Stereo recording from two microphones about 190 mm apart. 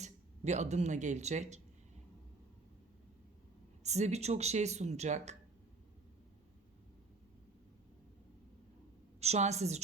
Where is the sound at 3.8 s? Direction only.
35° right (ahead or behind).